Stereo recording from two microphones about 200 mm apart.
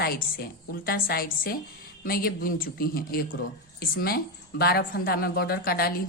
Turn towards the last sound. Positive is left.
turn(degrees=50)  # may be behind; listen again after turning